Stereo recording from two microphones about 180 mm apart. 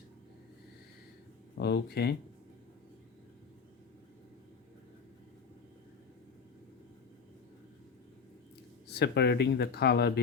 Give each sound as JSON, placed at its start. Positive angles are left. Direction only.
{"t": 1.5, "sound": "speech", "side_deg": 65}
{"t": 8.9, "sound": "speech", "side_deg": 65}